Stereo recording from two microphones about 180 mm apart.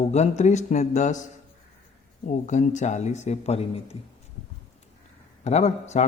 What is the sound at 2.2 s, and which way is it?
A man's voice, 40° left (ahead or behind).